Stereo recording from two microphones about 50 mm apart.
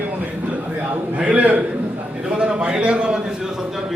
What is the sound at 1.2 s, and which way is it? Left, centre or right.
Speech, right.